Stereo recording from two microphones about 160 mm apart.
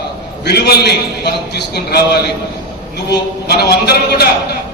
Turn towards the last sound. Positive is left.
turn(degrees=90)